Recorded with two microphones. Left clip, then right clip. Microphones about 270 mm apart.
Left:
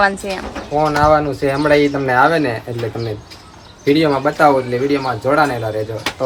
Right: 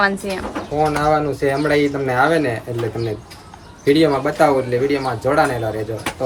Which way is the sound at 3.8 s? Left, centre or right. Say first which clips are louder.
Left 1 dB; centre.